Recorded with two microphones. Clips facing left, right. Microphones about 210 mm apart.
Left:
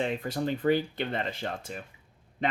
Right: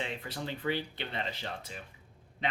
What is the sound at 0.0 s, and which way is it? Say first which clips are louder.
Speech: left 8 dB; 45° left (ahead or behind).